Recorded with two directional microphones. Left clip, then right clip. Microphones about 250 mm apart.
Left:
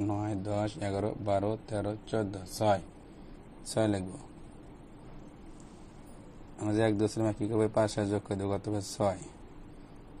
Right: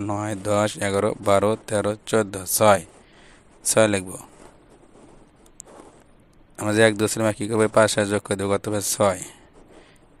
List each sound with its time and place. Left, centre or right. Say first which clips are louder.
0.0 s speech: right 7 dB; right
6.6 s speech: right 11 dB; right